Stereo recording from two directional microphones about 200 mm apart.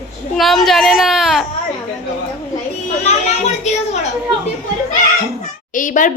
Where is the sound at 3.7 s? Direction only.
35° left (ahead or behind).